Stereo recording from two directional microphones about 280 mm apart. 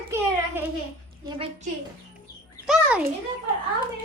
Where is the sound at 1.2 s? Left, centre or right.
Centre.